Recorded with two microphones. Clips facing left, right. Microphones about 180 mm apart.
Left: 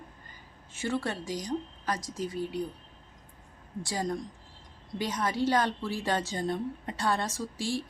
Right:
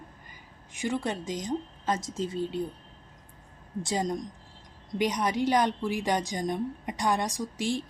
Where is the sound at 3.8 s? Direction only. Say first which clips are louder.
Right 3 dB; 20° right (ahead or behind).